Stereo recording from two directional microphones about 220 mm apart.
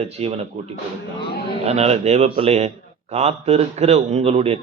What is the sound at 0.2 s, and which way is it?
Speech, 30° right (ahead or behind).